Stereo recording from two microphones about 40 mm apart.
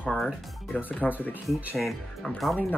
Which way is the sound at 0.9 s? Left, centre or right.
Left.